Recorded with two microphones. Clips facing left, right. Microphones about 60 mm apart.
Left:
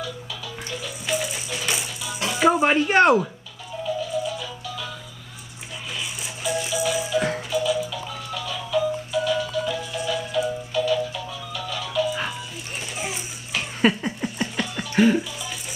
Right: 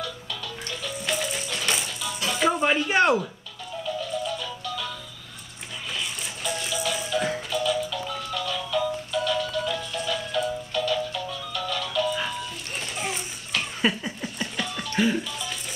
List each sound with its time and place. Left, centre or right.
0.7 s music: centre
3.0 s speech: centre
4.0 s music: centre
5.9 s music: centre
12.9 s a sound: centre
14.2 s music: centre